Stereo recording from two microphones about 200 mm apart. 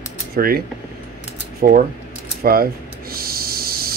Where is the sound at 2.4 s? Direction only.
50° right (ahead or behind).